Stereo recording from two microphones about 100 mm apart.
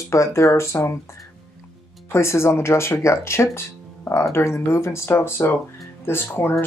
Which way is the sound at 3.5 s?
25° left (ahead or behind).